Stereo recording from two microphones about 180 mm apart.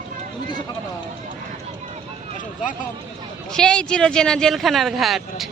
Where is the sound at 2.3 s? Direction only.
45° left (ahead or behind).